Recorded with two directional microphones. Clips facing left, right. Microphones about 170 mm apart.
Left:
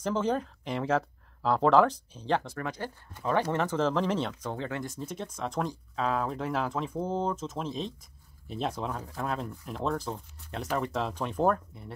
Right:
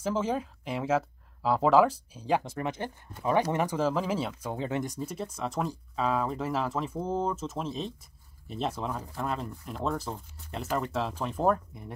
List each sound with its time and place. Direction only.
0.0 s speech: 5° right (ahead or behind)
4.6 s speech: 20° right (ahead or behind)
4.9 s speech: 5° right (ahead or behind)